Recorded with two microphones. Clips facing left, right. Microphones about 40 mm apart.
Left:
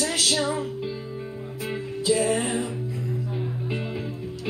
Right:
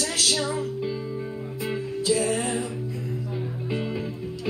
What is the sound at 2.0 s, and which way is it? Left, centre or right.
Music, centre.